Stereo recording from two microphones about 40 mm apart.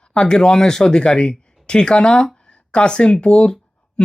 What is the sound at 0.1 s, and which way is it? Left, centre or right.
Speech, left.